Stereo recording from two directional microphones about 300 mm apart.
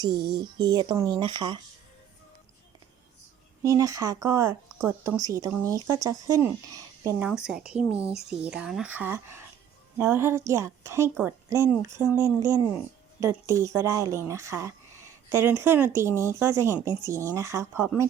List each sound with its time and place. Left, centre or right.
0.1 s speech: right
0.4 s speech: centre
3.6 s speech: centre